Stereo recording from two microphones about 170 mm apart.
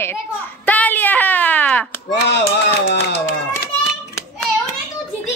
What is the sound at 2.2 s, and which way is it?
Speech, 90° left.